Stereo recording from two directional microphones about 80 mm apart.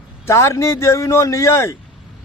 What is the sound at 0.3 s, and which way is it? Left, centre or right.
Speech, left.